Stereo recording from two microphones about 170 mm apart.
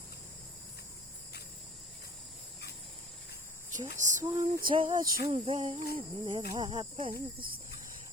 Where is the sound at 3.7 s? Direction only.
45° right (ahead or behind).